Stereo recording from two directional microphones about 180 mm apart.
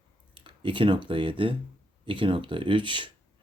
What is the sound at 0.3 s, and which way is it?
Speech, 30° right (ahead or behind).